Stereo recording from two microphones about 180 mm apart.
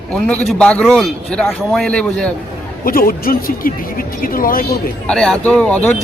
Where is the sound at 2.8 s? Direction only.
55° left (ahead or behind).